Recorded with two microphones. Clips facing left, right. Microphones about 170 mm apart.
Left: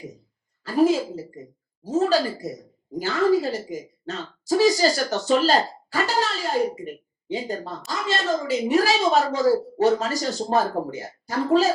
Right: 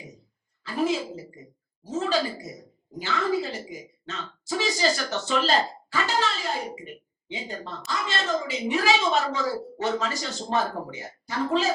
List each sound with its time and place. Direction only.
0.6 s a woman's voice: 40° left (ahead or behind)